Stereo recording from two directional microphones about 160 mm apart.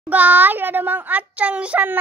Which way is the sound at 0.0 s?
10° right (ahead or behind).